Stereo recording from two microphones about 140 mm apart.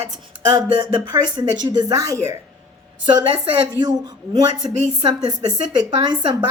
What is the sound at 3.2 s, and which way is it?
A woman's voice, 35° right (ahead or behind).